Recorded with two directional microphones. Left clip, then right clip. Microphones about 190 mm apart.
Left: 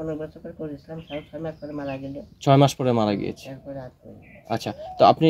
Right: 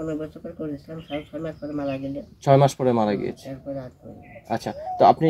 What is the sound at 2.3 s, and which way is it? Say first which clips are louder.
Speech: right 1 dB; 50° left (ahead or behind).